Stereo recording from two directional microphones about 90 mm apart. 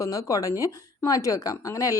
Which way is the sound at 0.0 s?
40° left (ahead or behind).